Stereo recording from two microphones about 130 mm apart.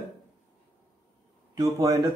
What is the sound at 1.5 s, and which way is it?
Speech, 25° right (ahead or behind).